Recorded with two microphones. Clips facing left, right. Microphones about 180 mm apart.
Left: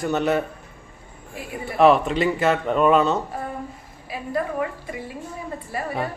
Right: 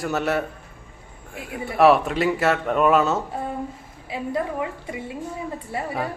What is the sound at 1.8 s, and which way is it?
A man's voice, centre (ahead or behind).